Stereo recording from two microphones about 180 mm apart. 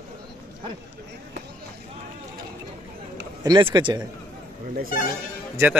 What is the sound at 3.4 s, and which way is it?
Speech, 25° right (ahead or behind).